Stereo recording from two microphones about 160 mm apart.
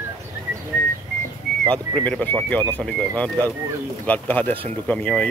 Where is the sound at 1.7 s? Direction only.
10° left (ahead or behind).